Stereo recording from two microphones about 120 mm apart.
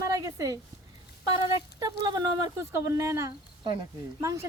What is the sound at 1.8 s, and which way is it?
Speech, 35° right (ahead or behind).